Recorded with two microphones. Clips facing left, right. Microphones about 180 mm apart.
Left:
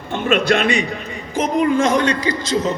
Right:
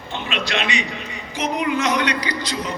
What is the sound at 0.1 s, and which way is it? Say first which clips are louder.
A man's voice: left 9 dB; 50° left (ahead or behind).